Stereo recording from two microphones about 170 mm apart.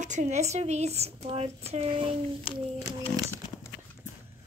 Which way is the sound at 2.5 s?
35° left (ahead or behind).